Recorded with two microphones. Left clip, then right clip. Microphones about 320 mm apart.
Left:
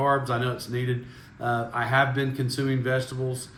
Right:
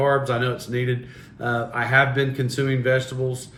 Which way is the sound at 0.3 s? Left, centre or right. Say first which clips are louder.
Right 4 dB; centre.